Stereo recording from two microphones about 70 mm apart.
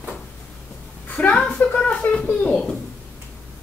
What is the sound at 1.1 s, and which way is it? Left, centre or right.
Speech, centre.